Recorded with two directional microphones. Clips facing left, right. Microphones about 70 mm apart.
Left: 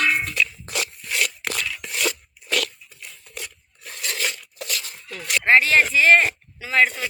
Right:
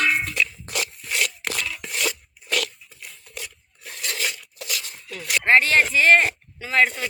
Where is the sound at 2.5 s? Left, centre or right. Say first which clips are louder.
Left 1 dB; centre.